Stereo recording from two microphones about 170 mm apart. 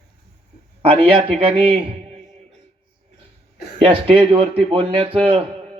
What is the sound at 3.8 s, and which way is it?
A man's voice, 30° right (ahead or behind).